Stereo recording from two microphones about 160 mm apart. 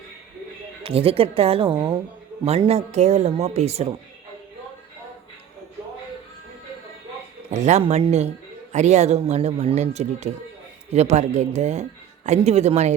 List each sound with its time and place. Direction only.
0.8 s a woman's voice: 35° right (ahead or behind)
7.5 s speech: 45° right (ahead or behind)